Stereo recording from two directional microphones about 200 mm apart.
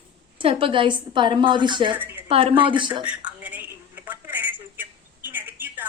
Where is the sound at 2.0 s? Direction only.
10° right (ahead or behind).